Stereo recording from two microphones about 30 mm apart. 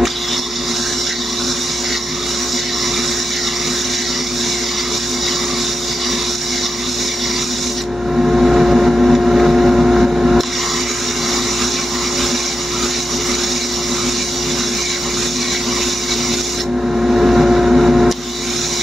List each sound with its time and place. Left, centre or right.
8.2 s vehicle: centre
17.0 s vehicle: centre